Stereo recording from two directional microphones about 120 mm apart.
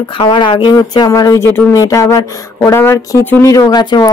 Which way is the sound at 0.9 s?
30° left (ahead or behind).